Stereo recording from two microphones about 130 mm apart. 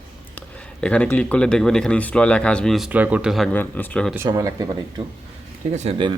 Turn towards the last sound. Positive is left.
turn(degrees=-60)  # may be behind; listen again after turning